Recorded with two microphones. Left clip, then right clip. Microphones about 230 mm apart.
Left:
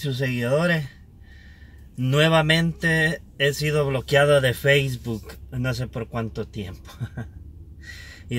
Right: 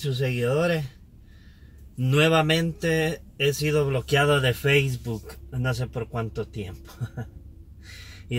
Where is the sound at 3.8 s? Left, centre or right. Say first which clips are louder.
Left 7 dB; centre.